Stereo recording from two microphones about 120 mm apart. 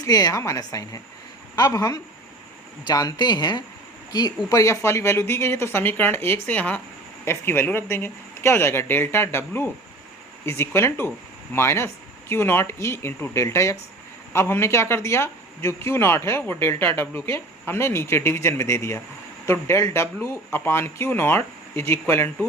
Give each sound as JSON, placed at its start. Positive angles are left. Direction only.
{"t": 0.0, "sound": "speech", "side_deg": 30}
{"t": 4.4, "sound": "speech", "side_deg": 25}
{"t": 10.4, "sound": "speech", "side_deg": 20}